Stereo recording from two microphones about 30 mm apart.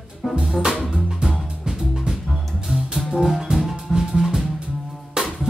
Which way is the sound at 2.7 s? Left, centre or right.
Right.